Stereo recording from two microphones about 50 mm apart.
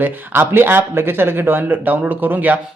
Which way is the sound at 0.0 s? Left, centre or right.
Right.